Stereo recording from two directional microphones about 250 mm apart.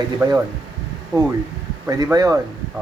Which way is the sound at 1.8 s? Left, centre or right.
Centre.